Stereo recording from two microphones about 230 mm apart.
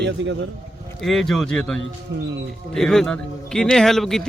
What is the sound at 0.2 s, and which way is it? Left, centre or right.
Speech, right.